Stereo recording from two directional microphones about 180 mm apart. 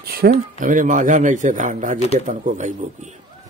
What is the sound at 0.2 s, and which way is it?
A man's voice, 50° right (ahead or behind).